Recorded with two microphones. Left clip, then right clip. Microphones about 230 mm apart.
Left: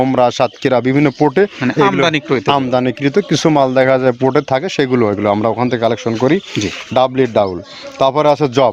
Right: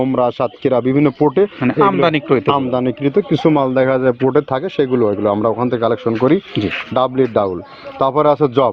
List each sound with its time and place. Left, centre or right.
0.0 s speech: left
1.6 s speech: left
2.5 s speech: left